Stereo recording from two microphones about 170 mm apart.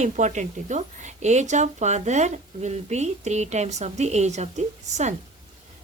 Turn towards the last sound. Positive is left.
turn(degrees=-45)  # may be behind; listen again after turning